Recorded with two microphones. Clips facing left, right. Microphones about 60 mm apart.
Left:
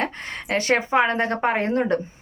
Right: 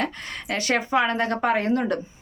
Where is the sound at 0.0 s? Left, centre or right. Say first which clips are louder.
Left 1 dB; left.